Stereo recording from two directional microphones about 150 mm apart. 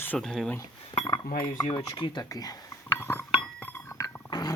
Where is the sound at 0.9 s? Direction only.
25° left (ahead or behind).